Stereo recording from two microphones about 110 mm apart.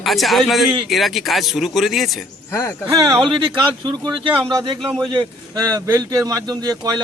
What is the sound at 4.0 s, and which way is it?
Speech, 45° right (ahead or behind).